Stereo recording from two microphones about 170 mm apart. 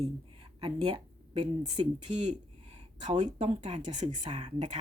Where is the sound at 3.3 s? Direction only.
45° right (ahead or behind).